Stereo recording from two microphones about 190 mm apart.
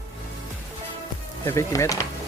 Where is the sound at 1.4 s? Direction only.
15° left (ahead or behind).